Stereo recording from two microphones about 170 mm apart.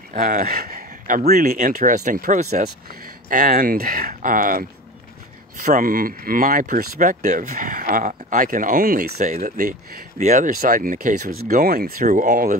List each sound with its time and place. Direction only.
0.1 s speech: 50° right (ahead or behind)